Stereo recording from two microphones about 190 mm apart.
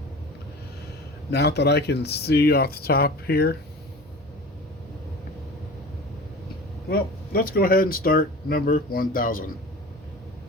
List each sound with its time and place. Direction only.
1.3 s speech: 60° left (ahead or behind)
6.8 s speech: 50° left (ahead or behind)